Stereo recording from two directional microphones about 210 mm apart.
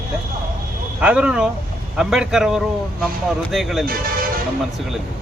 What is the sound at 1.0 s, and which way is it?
A man's voice, 5° right (ahead or behind).